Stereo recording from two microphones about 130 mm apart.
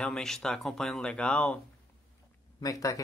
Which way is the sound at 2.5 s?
25° left (ahead or behind).